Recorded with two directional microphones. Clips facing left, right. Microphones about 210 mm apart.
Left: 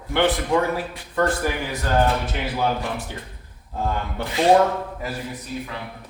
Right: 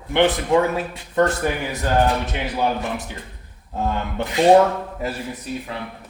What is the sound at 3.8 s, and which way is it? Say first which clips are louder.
Speech: right 2 dB; 20° right (ahead or behind).